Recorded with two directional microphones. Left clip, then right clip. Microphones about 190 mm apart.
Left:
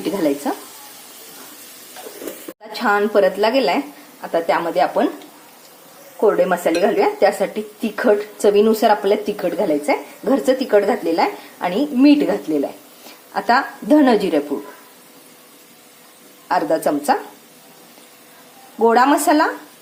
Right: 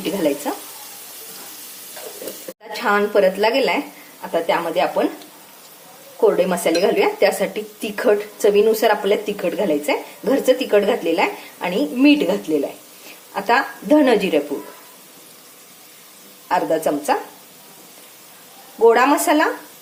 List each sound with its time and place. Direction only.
0.2 s a woman's voice: 10° left (ahead or behind)
2.7 s a woman's voice: 10° left (ahead or behind)
6.1 s a woman's voice: centre (ahead or behind)
13.3 s a woman's voice: 10° left (ahead or behind)
16.5 s a woman's voice: 15° left (ahead or behind)
18.8 s a woman's voice: 10° left (ahead or behind)